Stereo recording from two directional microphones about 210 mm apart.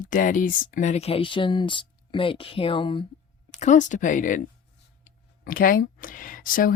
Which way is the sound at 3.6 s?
35° left (ahead or behind).